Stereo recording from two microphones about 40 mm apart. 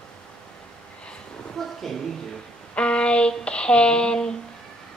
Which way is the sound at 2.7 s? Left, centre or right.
Left.